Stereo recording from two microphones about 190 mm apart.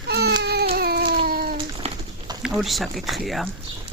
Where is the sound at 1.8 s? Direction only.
35° right (ahead or behind).